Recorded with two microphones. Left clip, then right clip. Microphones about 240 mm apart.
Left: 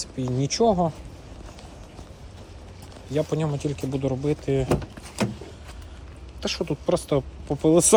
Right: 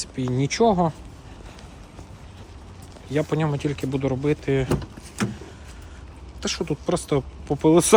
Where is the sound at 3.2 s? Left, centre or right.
Centre.